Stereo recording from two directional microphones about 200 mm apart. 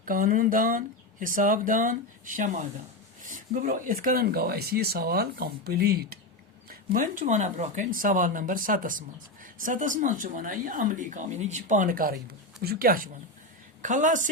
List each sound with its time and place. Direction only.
0.0 s speech: 45° right (ahead or behind)